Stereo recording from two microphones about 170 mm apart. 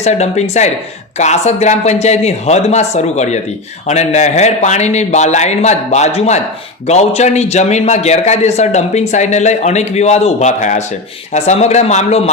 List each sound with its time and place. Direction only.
0.0 s a man's voice: 40° left (ahead or behind)